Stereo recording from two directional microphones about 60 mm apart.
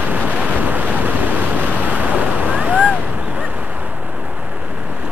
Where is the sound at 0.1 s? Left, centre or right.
Right.